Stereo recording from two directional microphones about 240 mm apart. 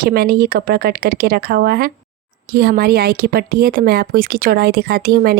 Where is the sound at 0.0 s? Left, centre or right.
Right.